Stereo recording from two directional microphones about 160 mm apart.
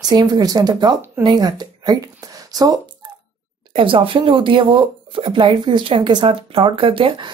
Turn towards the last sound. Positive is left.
turn(degrees=-35)  # may be behind; listen again after turning